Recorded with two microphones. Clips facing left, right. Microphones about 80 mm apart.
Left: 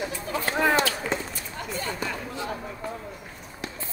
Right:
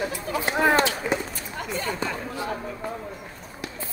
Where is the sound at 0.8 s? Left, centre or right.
Centre.